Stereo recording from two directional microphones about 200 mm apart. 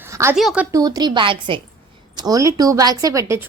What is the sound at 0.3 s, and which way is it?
A woman's voice, 5° right (ahead or behind).